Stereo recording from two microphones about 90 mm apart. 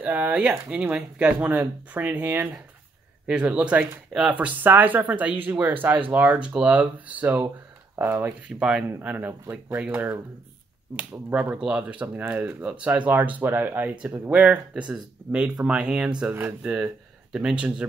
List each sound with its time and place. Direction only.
0.0 s speech: 15° right (ahead or behind)
8.5 s speech: 10° right (ahead or behind)